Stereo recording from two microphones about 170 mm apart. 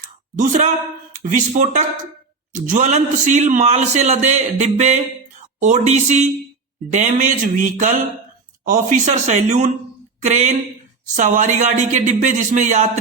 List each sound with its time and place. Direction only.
0.3 s a man's voice: 45° right (ahead or behind)